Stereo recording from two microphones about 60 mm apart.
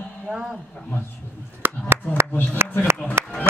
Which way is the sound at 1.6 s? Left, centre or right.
Right.